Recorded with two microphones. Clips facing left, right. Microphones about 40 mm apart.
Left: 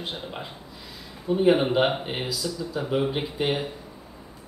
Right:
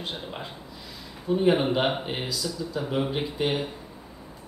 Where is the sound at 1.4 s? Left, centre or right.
Centre.